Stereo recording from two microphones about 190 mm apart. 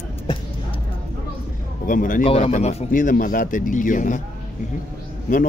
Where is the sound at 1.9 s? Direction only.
45° left (ahead or behind).